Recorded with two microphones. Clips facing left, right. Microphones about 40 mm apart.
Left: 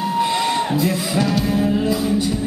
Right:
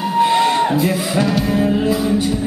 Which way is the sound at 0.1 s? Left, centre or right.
Centre.